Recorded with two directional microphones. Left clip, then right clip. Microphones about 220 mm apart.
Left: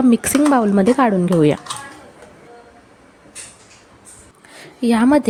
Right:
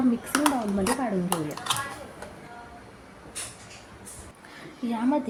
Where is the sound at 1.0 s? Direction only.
45° left (ahead or behind).